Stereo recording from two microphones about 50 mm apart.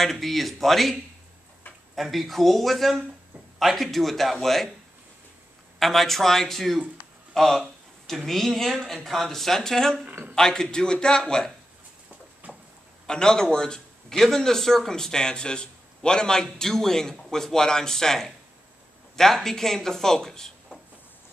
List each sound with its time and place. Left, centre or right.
0.0 s speech: centre
2.0 s speech: centre
5.8 s a man's voice: centre
12.4 s a sound: right
13.0 s a man's voice: centre